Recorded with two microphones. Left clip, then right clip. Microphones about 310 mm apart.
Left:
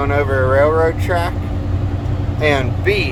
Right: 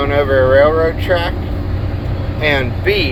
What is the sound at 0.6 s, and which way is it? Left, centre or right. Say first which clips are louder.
Speech: right 3 dB; centre.